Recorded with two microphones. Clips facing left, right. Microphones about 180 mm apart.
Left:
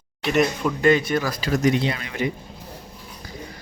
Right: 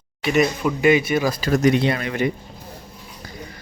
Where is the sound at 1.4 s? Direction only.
55° right (ahead or behind).